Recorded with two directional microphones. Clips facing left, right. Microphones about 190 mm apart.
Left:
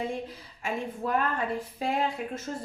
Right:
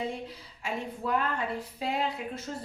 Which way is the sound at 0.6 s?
50° left (ahead or behind).